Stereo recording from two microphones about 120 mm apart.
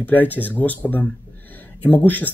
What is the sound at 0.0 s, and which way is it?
Speech, 15° left (ahead or behind).